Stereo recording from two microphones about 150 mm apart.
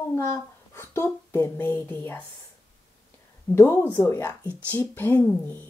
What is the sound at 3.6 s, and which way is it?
Speech, 20° left (ahead or behind).